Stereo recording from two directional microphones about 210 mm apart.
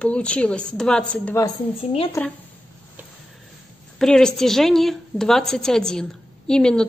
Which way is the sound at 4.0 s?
5° left (ahead or behind).